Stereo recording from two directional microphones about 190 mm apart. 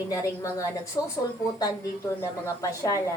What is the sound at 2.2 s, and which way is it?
Speech, 15° left (ahead or behind).